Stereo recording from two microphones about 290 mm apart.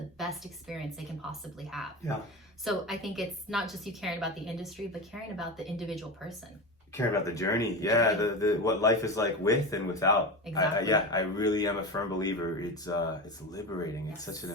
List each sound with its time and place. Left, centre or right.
0.2 s a woman's voice: centre
6.9 s speech: centre